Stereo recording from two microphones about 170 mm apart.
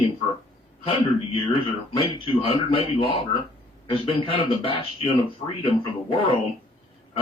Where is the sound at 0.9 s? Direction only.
30° left (ahead or behind).